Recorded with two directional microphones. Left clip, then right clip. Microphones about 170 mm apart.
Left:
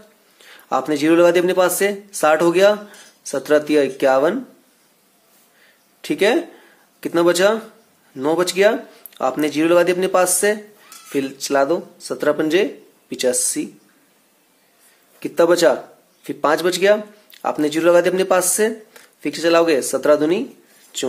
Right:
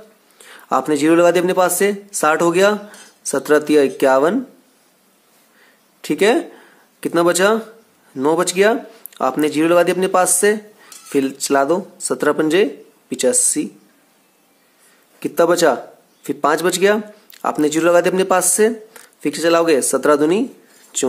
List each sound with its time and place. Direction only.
0.4 s speech: 30° right (ahead or behind)
5.9 s speech: 25° right (ahead or behind)
15.1 s speech: 25° right (ahead or behind)